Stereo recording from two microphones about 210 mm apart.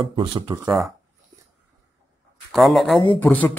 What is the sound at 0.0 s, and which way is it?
Speech, 25° right (ahead or behind).